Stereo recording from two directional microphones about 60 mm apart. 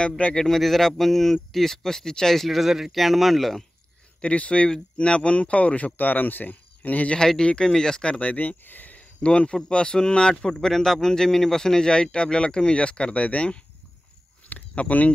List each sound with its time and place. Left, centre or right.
0.2 s a man's voice: centre
4.2 s speech: left
7.2 s a man's voice: centre